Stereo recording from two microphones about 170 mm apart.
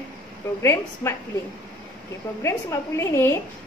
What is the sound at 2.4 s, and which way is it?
A woman's voice, 15° left (ahead or behind).